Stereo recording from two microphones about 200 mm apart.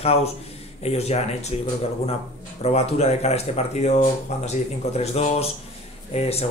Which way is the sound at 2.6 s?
30° left (ahead or behind).